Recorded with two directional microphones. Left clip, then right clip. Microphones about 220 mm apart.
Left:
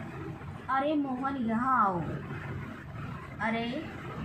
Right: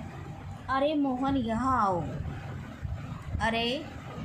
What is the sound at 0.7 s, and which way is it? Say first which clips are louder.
A woman's voice: right 2 dB; 35° right (ahead or behind).